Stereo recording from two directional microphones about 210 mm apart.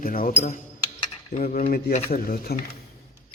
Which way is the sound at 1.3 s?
35° left (ahead or behind).